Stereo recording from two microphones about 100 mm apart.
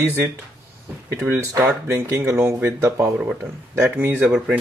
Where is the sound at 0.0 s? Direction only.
25° right (ahead or behind).